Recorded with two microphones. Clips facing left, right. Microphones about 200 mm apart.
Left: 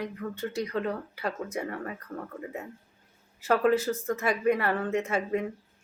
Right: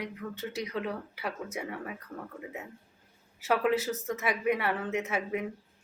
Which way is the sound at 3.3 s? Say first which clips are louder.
Left 3 dB; 5° right (ahead or behind).